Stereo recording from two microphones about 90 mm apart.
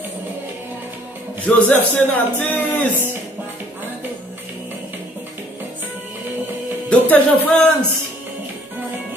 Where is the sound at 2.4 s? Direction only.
20° left (ahead or behind).